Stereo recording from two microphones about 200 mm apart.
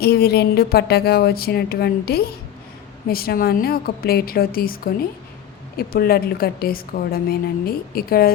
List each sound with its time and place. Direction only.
0.0 s a woman's voice: 50° left (ahead or behind)